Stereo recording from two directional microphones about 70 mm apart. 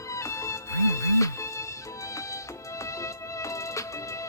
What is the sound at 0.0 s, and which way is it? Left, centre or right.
Music, left.